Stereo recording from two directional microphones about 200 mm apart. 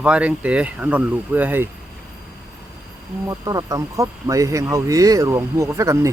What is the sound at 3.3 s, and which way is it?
Speech, 15° right (ahead or behind).